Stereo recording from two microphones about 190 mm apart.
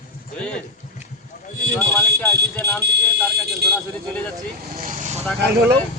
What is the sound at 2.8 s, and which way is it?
Speech, 60° right (ahead or behind).